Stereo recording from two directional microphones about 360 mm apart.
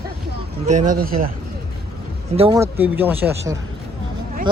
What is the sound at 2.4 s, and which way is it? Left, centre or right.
Speech, centre.